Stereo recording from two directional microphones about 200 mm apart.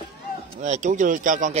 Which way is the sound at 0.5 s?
35° right (ahead or behind).